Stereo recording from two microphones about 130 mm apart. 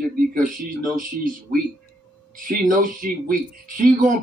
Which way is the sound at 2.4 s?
90° right.